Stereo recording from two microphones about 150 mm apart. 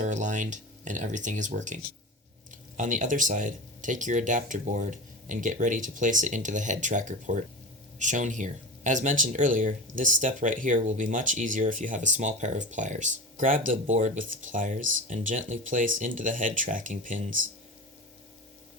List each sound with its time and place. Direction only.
0.0 s speech: 55° right (ahead or behind)